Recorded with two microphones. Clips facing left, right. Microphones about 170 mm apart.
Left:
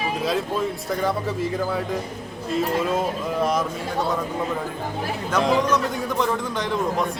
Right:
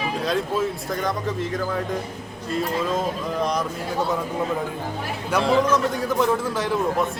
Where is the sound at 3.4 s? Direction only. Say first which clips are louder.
Left 2 dB; 5° left (ahead or behind).